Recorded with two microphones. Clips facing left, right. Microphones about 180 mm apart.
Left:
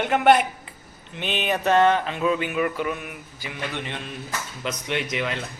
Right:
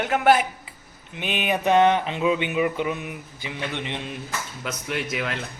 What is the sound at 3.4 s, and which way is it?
Speech, 20° right (ahead or behind).